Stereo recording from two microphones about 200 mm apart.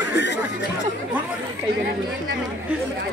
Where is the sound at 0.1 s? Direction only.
60° left (ahead or behind).